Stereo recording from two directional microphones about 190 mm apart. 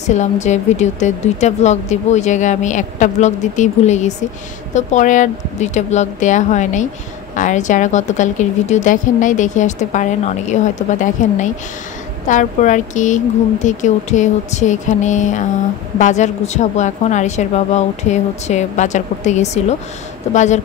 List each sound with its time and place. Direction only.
0.1 s a woman's voice: 40° left (ahead or behind)